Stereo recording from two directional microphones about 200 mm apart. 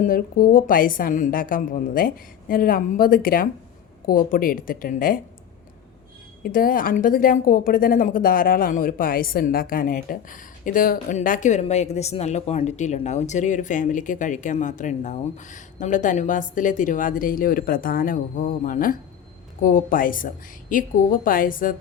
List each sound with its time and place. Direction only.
0.0 s a woman's voice: 45° left (ahead or behind)
6.4 s a woman's voice: 45° left (ahead or behind)